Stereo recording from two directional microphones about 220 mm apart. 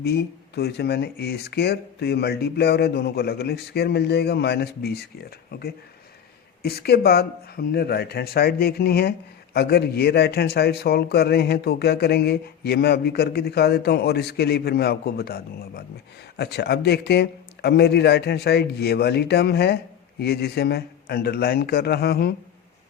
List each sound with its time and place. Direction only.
0.0 s speech: 45° left (ahead or behind)